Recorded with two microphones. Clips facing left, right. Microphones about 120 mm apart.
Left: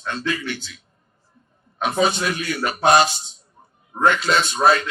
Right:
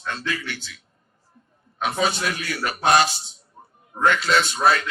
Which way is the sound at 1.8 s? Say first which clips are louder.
Left 3 dB; 20° left (ahead or behind).